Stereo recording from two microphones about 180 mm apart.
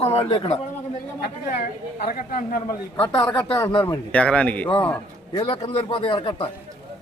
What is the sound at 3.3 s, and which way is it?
Speech, 25° left (ahead or behind).